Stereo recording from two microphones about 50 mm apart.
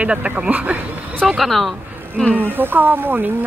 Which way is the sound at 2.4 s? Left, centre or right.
Right.